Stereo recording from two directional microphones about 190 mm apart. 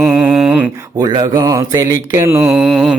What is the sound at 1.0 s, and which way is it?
Mantra, 20° right (ahead or behind).